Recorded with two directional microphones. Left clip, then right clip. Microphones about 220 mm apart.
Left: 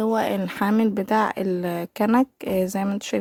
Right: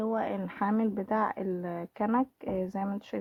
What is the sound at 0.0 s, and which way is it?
Speech, 50° left (ahead or behind).